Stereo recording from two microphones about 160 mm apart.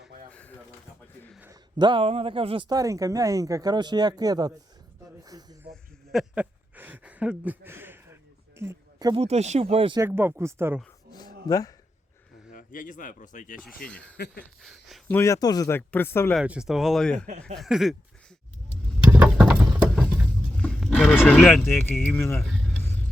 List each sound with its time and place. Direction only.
0.3 s drawer open or close: 10° left (ahead or behind)
1.8 s speech: 35° right (ahead or behind)
2.6 s speech: 20° right (ahead or behind)
5.2 s a sound: 25° right (ahead or behind)
5.7 s a sound: centre (ahead or behind); by 9.2 s 25° right (ahead or behind)
9.2 s speech: 45° right (ahead or behind)
10.0 s speech: 15° right (ahead or behind)
11.4 s speech: 20° left (ahead or behind)
12.5 s speech: 55° left (ahead or behind)
13.8 s speech: 5° left (ahead or behind)
16.3 s speech: 5° right (ahead or behind)
19.1 s a sound: 10° right (ahead or behind)
20.6 s speech: 5° left (ahead or behind)